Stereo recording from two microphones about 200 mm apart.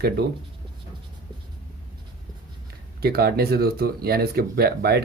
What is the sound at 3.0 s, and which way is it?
Speech, 50° right (ahead or behind).